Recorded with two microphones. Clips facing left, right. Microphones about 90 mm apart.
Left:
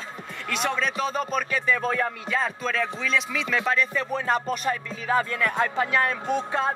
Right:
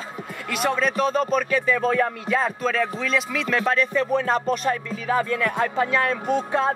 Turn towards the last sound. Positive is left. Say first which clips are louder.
# right 3 dB
turn(degrees=0)  # may be behind; listen again after turning